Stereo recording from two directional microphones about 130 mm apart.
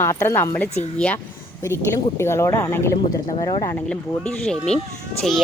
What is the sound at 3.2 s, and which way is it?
Speech, 35° left (ahead or behind).